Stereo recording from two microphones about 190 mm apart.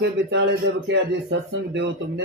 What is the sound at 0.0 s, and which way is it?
A man's voice, 70° right (ahead or behind).